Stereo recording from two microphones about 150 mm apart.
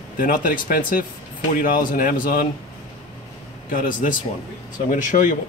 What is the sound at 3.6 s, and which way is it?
Speech, 60° left (ahead or behind).